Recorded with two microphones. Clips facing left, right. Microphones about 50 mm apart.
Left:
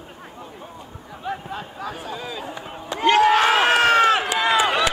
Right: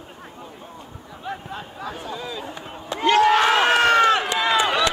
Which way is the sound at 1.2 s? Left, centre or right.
Centre.